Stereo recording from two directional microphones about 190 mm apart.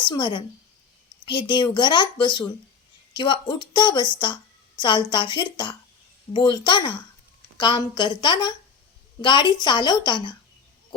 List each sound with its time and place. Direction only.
0.0 s a woman's voice: 25° left (ahead or behind)